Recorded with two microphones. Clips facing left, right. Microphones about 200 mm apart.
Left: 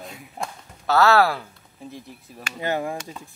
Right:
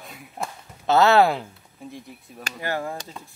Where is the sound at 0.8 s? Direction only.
20° right (ahead or behind).